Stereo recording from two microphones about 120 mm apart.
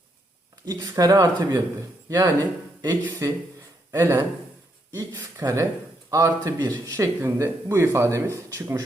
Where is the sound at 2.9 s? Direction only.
20° right (ahead or behind).